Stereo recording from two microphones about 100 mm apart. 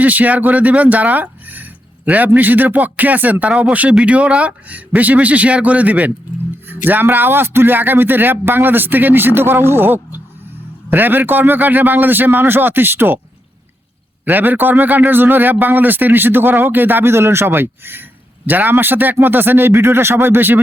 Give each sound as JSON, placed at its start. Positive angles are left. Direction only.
{"t": 0.0, "sound": "a man's voice", "side_deg": -15}
{"t": 14.3, "sound": "a man's voice", "side_deg": -20}